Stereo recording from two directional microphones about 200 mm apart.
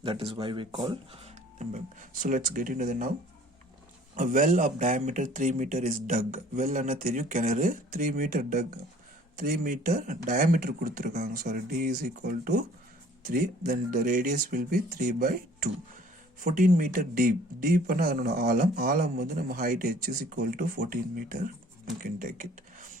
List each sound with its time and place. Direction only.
0.0 s speech: 25° right (ahead or behind); by 3.1 s 40° right (ahead or behind)
4.1 s a man's voice: 40° right (ahead or behind)